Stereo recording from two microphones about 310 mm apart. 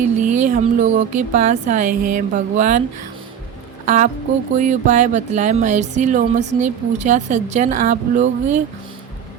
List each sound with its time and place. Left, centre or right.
0.2 s a woman's voice: right
3.8 s a woman's voice: right